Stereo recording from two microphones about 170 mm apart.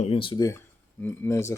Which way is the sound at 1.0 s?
15° left (ahead or behind).